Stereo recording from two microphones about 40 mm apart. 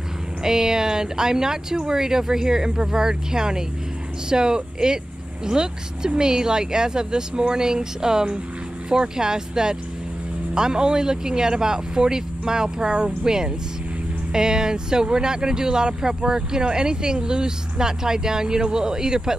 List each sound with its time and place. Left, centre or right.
0.4 s speech: centre